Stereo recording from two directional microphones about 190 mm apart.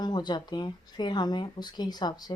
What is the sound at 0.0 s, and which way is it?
Speech, 20° left (ahead or behind).